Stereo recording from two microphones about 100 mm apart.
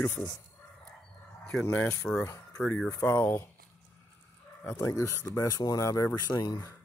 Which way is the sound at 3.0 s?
25° left (ahead or behind).